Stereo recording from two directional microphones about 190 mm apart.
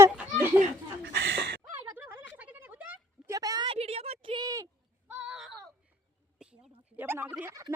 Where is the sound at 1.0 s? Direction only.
70° right (ahead or behind).